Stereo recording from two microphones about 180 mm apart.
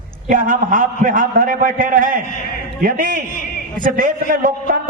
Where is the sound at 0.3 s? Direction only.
45° right (ahead or behind).